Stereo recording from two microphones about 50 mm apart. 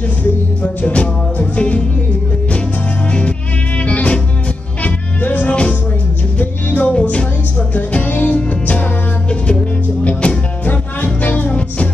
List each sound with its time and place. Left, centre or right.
0.6 s music: left
3.1 s music: left
10.0 s music: left